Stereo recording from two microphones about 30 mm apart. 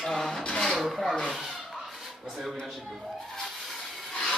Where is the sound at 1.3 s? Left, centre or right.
Centre.